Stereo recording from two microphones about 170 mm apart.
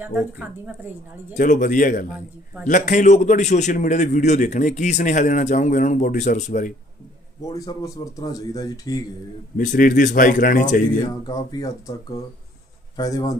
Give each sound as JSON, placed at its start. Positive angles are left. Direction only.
{"t": 0.0, "sound": "speech", "side_deg": -10}
{"t": 1.3, "sound": "a man's voice", "side_deg": 50}
{"t": 7.4, "sound": "speech", "side_deg": 20}
{"t": 9.6, "sound": "a man's voice", "side_deg": 50}
{"t": 11.0, "sound": "speech", "side_deg": 20}